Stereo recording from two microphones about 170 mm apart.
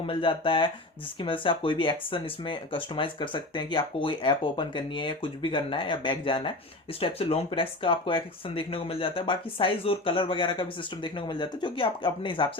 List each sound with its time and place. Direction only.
0.1 s speech: 30° left (ahead or behind)